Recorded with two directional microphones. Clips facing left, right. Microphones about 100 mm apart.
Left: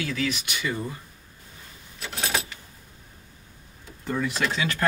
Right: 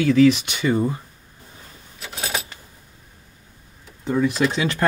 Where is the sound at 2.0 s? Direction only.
5° right (ahead or behind).